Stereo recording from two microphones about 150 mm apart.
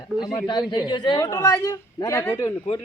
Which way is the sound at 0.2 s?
25° left (ahead or behind).